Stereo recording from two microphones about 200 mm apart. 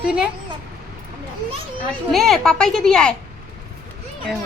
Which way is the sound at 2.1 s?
Centre (ahead or behind).